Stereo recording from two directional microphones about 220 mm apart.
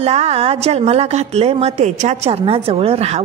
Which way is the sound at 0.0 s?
30° right (ahead or behind).